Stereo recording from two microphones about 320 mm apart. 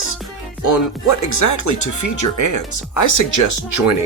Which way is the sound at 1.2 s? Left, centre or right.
Left.